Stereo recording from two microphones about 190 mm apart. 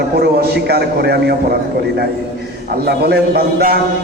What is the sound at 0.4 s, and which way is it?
Speech, 60° right (ahead or behind).